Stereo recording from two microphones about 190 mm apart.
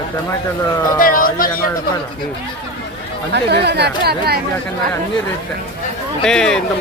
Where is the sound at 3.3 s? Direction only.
60° right (ahead or behind).